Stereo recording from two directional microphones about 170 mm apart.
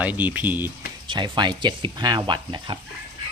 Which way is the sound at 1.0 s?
30° right (ahead or behind).